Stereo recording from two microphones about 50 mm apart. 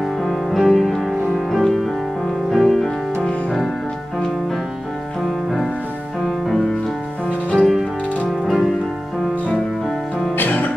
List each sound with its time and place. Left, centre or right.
0.2 s music: centre
6.2 s music: centre
10.3 s music: left